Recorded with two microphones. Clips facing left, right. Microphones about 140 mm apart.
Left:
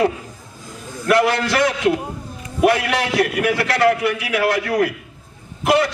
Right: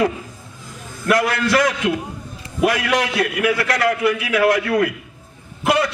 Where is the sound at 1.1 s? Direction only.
30° left (ahead or behind).